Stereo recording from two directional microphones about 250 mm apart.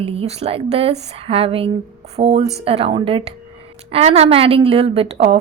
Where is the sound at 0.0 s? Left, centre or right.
Right.